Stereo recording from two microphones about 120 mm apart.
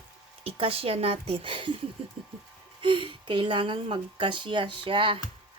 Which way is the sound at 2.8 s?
45° right (ahead or behind).